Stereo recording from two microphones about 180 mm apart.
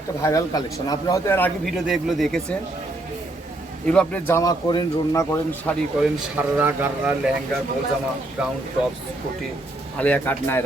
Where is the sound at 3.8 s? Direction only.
5° left (ahead or behind).